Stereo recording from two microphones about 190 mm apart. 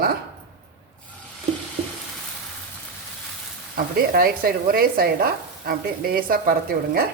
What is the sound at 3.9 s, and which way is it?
Speech, 50° right (ahead or behind).